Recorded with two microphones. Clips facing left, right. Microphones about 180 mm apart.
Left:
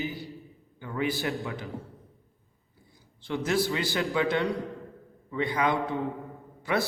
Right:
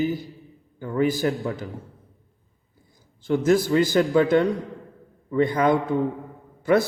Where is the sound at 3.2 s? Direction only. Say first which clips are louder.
Right 8 dB; 45° right (ahead or behind).